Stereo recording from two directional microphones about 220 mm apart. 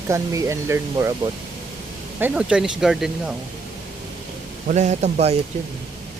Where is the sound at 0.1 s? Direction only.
15° right (ahead or behind).